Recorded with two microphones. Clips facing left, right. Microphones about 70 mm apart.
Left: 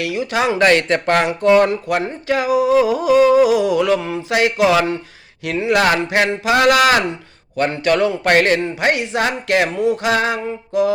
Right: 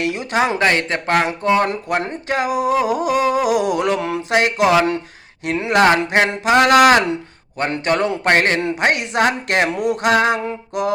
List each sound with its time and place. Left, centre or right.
0.0 s speech: right
0.3 s mantra: right
0.6 s speech: right
1.7 s speech: right
3.2 s mantra: right
3.4 s speech: right
4.3 s speech: right
5.8 s mantra: right
7.9 s mantra: right
8.8 s speech: right
9.7 s a sound: right
10.1 s speech: right